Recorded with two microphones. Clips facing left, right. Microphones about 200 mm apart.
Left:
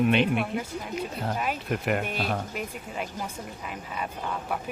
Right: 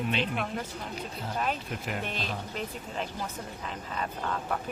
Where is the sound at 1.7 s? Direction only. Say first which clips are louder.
Left 8 dB; 60° left (ahead or behind).